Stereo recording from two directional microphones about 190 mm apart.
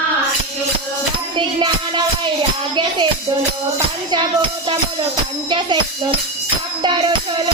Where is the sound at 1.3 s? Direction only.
25° right (ahead or behind).